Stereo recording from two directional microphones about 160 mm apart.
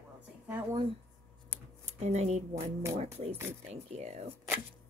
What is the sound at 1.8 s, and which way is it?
Speech, 45° right (ahead or behind).